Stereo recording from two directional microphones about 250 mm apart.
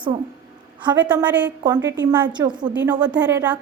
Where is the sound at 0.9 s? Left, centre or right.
Centre.